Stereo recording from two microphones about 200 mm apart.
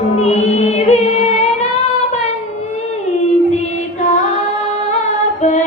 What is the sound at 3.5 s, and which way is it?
Female singing, 35° left (ahead or behind).